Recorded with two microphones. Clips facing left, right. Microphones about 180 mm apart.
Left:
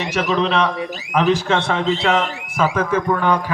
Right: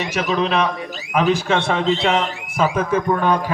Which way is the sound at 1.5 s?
20° right (ahead or behind).